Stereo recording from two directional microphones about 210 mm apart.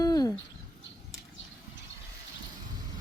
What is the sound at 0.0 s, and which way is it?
Bird, 15° left (ahead or behind).